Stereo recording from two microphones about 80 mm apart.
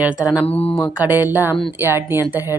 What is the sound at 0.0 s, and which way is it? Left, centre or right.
Speech, centre.